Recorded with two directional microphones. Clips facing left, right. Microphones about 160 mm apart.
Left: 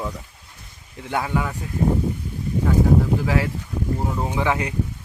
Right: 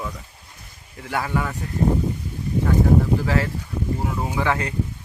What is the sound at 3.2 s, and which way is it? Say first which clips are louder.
Speech: even; 15° left (ahead or behind).